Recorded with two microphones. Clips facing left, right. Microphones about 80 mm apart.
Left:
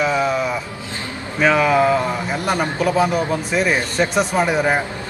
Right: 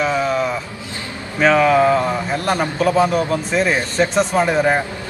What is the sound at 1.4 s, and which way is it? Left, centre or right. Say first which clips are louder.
A man's voice: right 2 dB; centre.